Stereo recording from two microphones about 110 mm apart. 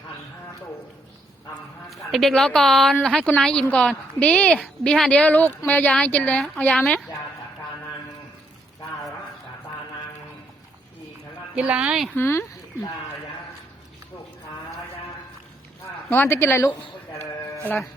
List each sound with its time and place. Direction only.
1.9 s a woman's voice: centre (ahead or behind)
11.5 s speech: 10° right (ahead or behind)
12.1 s speech: 20° left (ahead or behind)
16.0 s speech: 20° left (ahead or behind)